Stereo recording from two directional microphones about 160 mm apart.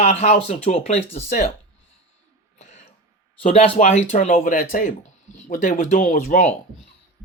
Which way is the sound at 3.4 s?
40° left (ahead or behind).